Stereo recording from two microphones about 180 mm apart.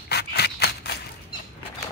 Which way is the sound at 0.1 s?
65° left (ahead or behind).